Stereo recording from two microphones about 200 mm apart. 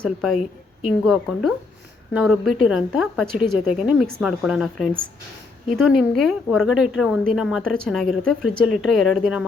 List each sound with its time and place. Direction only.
0.0 s a woman's voice: centre (ahead or behind)